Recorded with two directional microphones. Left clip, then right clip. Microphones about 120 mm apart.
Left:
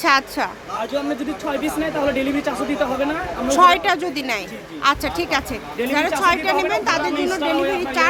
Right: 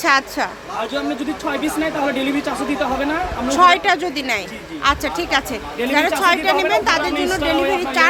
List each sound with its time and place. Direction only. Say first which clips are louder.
0.0 s a woman's voice: right 1 dB; centre (ahead or behind)
2.4 s speech: right 1 dB; 25° left (ahead or behind)
3.5 s a woman's voice: right 1 dB; 10° left (ahead or behind); by 8.0 s 10° right (ahead or behind)